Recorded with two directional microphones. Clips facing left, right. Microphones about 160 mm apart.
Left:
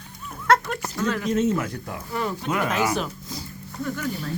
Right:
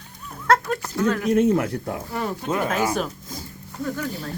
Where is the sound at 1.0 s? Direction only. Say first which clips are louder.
Right 4 dB; 55° right (ahead or behind).